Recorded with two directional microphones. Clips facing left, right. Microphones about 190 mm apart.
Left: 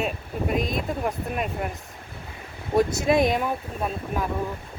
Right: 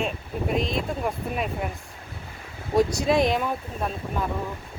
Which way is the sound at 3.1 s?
50° left (ahead or behind).